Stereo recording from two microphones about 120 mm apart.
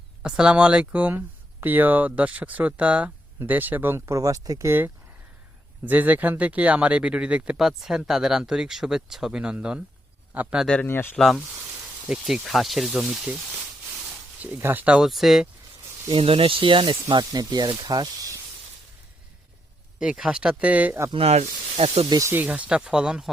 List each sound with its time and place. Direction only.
0.2 s speech: 5° right (ahead or behind)
10.8 s speech: 20° left (ahead or behind)
11.2 s speech: centre (ahead or behind)
14.4 s speech: 15° right (ahead or behind)
16.0 s speech: 50° right (ahead or behind); by 18.3 s 30° right (ahead or behind)
20.0 s speech: 5° right (ahead or behind)
21.1 s speech: 55° right (ahead or behind)
22.3 s speech: 15° right (ahead or behind)